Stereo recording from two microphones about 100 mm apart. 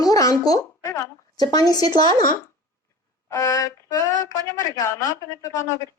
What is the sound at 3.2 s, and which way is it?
A woman's voice, 35° left (ahead or behind).